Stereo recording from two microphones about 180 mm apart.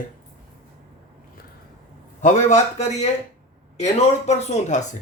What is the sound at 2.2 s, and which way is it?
Speech, 40° left (ahead or behind).